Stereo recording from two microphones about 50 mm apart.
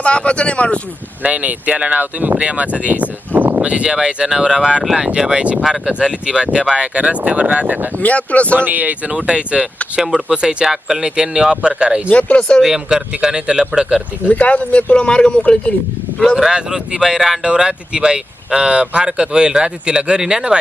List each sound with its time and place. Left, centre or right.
0.0 s speech: left
1.2 s speech: right
3.6 s speech: right
5.6 s speech: centre; by 7.8 s right
8.0 s speech: left
8.5 s speech: right; by 12.0 s centre
12.4 s speech: centre
12.6 s speech: centre
14.3 s speech: left
16.3 s speech: centre
17.4 s speech: centre